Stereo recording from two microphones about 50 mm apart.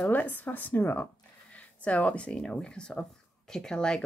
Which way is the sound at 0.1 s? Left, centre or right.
Left.